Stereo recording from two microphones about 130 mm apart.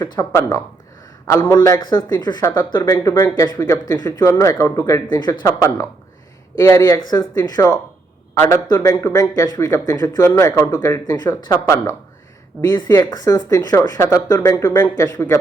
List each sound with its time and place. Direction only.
0.0 s speech: 25° left (ahead or behind)